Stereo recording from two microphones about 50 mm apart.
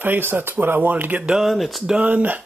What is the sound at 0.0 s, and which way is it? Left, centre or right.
Speech, right.